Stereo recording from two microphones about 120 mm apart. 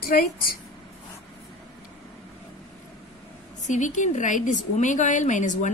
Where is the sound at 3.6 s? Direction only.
90° left.